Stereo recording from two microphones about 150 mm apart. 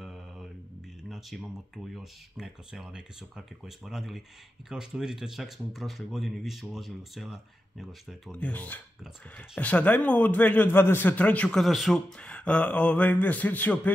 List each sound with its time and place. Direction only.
0.0 s mantra: centre (ahead or behind)
1.0 s a sound: centre (ahead or behind)
2.0 s speech: 5° right (ahead or behind)
8.3 s a man's voice: 10° left (ahead or behind)